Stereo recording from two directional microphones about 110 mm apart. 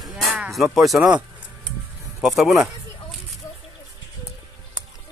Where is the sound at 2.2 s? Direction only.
Centre (ahead or behind).